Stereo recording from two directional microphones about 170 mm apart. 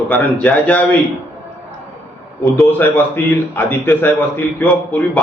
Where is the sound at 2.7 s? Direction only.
10° left (ahead or behind).